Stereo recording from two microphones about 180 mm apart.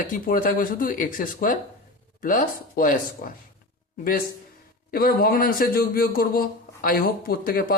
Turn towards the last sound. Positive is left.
turn(degrees=55)  # may be behind; listen again after turning